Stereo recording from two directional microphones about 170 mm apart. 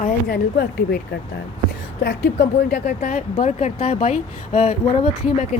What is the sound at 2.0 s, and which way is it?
Speech, 70° left (ahead or behind).